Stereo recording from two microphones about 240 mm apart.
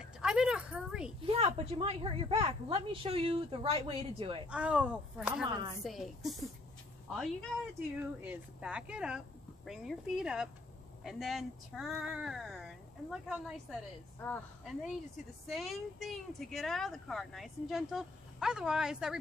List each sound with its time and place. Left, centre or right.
0.0 s speech: centre
1.2 s a woman's voice: right
4.5 s a woman's voice: centre